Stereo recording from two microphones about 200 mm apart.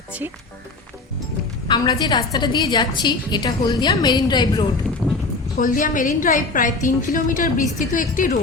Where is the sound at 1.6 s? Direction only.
20° left (ahead or behind).